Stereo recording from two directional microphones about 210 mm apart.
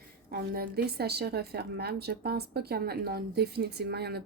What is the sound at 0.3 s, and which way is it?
A woman's voice, 45° right (ahead or behind).